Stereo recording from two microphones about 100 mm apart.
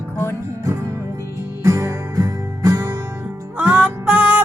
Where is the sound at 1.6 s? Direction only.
30° right (ahead or behind).